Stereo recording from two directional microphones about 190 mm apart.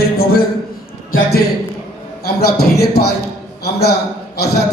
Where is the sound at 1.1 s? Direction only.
55° left (ahead or behind).